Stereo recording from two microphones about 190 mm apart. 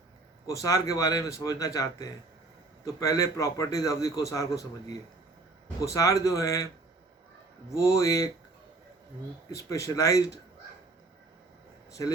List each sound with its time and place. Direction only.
0.4 s a man's voice: 15° left (ahead or behind)
7.7 s a man's voice: 15° left (ahead or behind)
9.5 s a man's voice: 15° left (ahead or behind)